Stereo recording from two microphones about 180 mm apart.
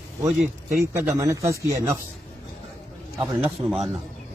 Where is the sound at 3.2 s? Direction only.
5° right (ahead or behind).